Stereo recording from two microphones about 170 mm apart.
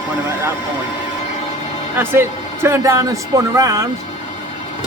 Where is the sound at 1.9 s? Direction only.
15° right (ahead or behind).